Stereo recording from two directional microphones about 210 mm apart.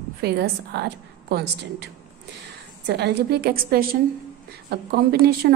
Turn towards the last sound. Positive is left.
turn(degrees=-50)  # may be behind; listen again after turning